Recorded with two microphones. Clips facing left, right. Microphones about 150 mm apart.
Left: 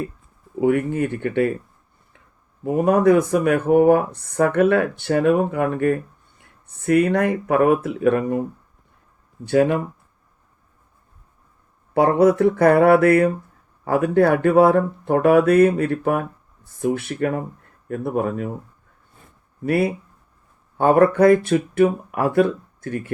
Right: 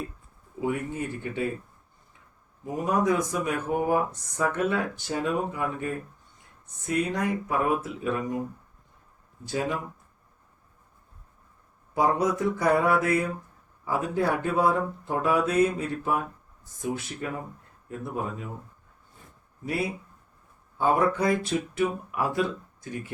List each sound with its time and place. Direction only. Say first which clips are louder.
0.6 s speech: left 10 dB; 65° left (ahead or behind)
2.6 s speech: left 9 dB; 60° left (ahead or behind)
11.9 s speech: left 9 dB; 65° left (ahead or behind)
19.6 s speech: left 10 dB; 60° left (ahead or behind)